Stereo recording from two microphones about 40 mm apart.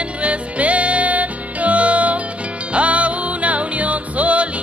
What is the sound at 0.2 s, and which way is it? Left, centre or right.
Music, right.